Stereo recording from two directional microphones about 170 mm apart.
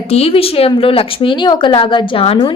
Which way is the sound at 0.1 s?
35° left (ahead or behind).